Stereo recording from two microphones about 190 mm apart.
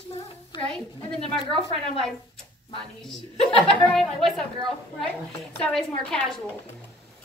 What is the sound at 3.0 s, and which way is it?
A woman's voice, centre (ahead or behind).